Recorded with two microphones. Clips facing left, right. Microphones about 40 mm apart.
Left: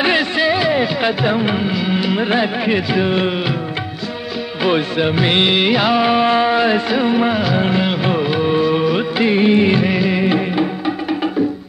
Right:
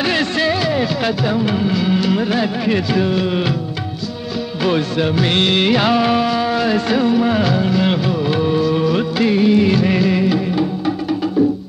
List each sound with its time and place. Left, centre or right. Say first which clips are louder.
0.0 s music: left 2 dB; centre
2.2 s music of bollywood: left 1 dB; left
4.6 s music of bollywood: left 1 dB; left
6.2 s a sound: left 3 dB; left
6.9 s music of bollywood: even; left
7.5 s music: left 1 dB; left
8.3 s music of bollywood: even; left
9.8 s music of bollywood: right 1 dB; centre
10.2 s music: left 1 dB; left